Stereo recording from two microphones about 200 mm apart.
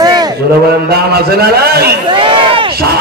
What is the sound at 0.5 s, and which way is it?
A man's voice, 50° right (ahead or behind).